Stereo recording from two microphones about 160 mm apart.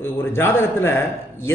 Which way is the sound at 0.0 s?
15° left (ahead or behind).